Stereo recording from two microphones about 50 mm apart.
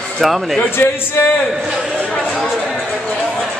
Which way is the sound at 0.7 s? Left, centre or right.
Left.